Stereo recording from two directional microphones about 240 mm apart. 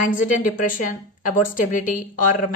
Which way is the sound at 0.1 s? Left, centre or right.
Left.